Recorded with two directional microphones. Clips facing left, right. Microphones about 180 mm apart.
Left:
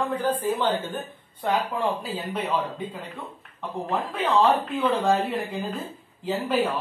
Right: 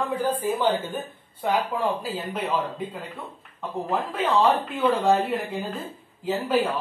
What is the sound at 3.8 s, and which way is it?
A woman's voice, 5° right (ahead or behind).